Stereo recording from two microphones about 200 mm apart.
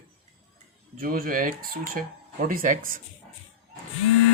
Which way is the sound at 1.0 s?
45° right (ahead or behind).